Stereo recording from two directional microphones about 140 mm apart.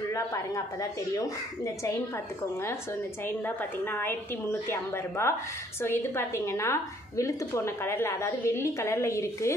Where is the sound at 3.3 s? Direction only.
15° left (ahead or behind).